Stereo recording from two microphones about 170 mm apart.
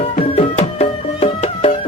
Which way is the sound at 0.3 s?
40° left (ahead or behind).